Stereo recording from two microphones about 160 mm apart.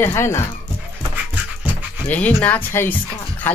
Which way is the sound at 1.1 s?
10° right (ahead or behind).